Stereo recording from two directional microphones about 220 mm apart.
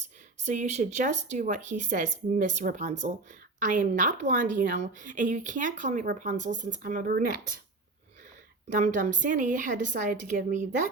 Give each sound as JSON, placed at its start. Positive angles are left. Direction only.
{"t": 0.3, "sound": "a woman's voice", "side_deg": -35}
{"t": 8.7, "sound": "a woman's voice", "side_deg": -35}